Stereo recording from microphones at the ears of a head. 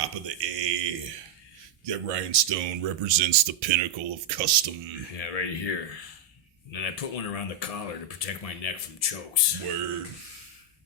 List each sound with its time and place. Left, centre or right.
0.0 s a sound: right
1.8 s speech: right
5.1 s speech: left
9.6 s speech: right